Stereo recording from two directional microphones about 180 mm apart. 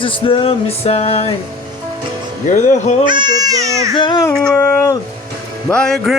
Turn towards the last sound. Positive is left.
turn(degrees=5)  # may be behind; listen again after turning